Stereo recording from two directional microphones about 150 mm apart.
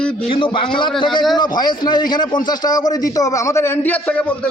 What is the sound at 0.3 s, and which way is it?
A man's voice, 35° left (ahead or behind).